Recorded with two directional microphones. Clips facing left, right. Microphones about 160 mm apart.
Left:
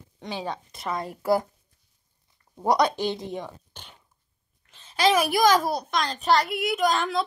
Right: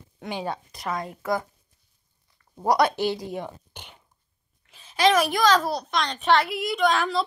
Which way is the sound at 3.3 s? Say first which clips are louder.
Right 1 dB; 10° right (ahead or behind).